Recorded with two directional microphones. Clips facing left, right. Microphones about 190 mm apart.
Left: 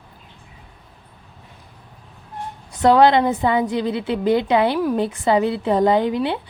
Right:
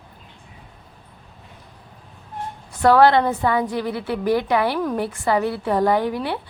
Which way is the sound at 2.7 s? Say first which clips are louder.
Left 1 dB; 20° left (ahead or behind).